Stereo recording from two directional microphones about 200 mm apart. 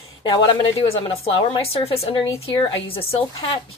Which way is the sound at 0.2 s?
25° left (ahead or behind).